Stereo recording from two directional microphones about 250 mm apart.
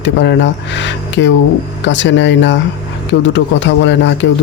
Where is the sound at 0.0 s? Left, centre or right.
Left.